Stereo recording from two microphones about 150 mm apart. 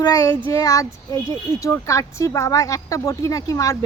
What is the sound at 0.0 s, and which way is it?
Speech, 25° left (ahead or behind).